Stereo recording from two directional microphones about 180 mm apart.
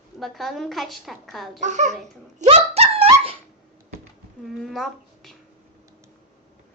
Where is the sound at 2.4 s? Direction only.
35° right (ahead or behind).